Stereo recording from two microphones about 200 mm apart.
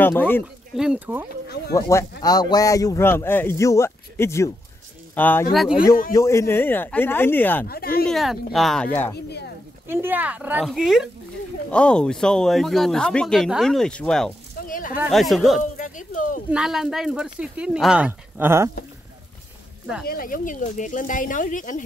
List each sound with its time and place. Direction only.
0.0 s speech: 10° left (ahead or behind)
0.7 s speech: 5° right (ahead or behind)
1.7 s speech: 15° left (ahead or behind); by 5.8 s centre (ahead or behind)
6.1 s speech: 15° left (ahead or behind)
7.6 s speech: 50° left (ahead or behind)
8.1 s speech: centre (ahead or behind)
9.8 s speech: 10° right (ahead or behind)
14.7 s speech: 45° left (ahead or behind)
15.0 s speech: centre (ahead or behind)
15.8 s speech: 40° left (ahead or behind)
16.4 s speech: 5° right (ahead or behind)
20.1 s speech: 45° left (ahead or behind)